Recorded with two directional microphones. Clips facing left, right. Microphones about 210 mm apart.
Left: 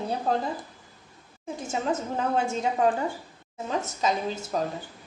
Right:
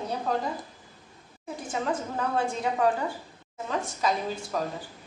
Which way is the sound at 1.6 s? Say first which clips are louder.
Left 2 dB; 25° left (ahead or behind).